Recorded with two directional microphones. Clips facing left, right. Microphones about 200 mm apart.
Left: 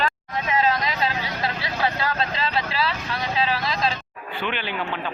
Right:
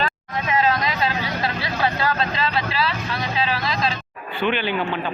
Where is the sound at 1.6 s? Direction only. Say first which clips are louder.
Right 3 dB; 20° left (ahead or behind).